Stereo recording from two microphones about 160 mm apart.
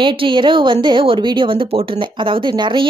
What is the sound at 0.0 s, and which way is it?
A woman's voice, 30° right (ahead or behind).